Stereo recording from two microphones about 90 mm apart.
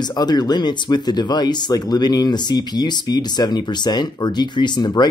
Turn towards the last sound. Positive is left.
turn(degrees=55)  # may be behind; listen again after turning